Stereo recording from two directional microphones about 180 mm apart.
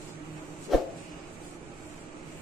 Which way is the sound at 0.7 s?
Centre (ahead or behind).